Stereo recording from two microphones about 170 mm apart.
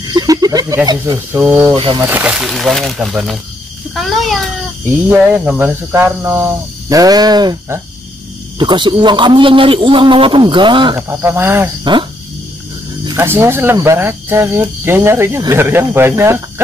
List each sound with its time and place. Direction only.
0.0 s a sound: 25° right (ahead or behind)
0.8 s a man's voice: 25° right (ahead or behind)
1.3 s speech: 10° right (ahead or behind)
1.7 s a man's voice: 30° right (ahead or behind)
2.0 s a man's voice: 10° right (ahead or behind); by 11.0 s 30° right (ahead or behind)
11.0 s speech: 15° right (ahead or behind)
11.8 s a man's voice: 30° right (ahead or behind)
13.0 s speech: 15° right (ahead or behind)